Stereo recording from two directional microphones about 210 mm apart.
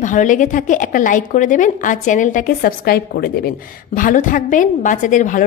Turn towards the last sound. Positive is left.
turn(degrees=40)  # may be behind; listen again after turning